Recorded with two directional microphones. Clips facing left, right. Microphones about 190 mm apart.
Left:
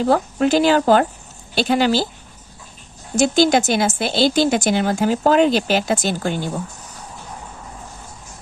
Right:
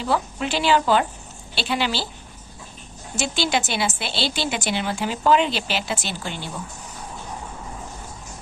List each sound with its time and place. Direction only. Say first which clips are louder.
0.0 s speech: left 7 dB; 45° left (ahead or behind)
3.2 s speech: left 9 dB; 45° left (ahead or behind)